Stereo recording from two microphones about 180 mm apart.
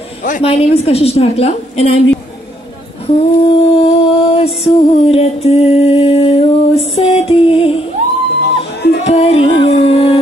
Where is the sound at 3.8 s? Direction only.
30° left (ahead or behind).